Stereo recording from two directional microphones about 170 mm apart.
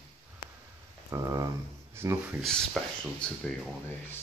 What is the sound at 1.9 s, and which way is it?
Speech, 15° right (ahead or behind).